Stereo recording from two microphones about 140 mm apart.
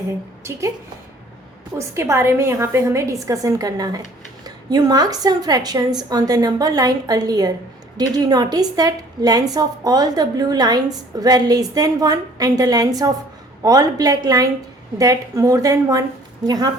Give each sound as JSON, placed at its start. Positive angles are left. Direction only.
{"t": 1.8, "sound": "a woman's voice", "side_deg": -20}